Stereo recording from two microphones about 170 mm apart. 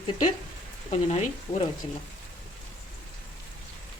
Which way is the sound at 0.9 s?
40° left (ahead or behind).